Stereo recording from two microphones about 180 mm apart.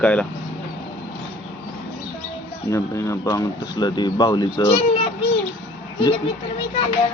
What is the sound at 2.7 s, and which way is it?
Speech, 15° left (ahead or behind).